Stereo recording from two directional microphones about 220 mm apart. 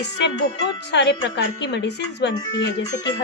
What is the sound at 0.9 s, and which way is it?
Speech, 50° left (ahead or behind).